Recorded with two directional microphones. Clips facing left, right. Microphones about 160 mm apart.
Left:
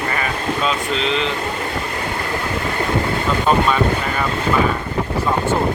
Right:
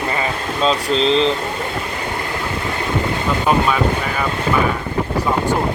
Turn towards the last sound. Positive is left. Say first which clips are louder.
# even
turn(degrees=-5)  # may be behind; listen again after turning